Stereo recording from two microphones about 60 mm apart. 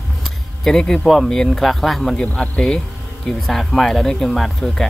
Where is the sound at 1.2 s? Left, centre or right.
Centre.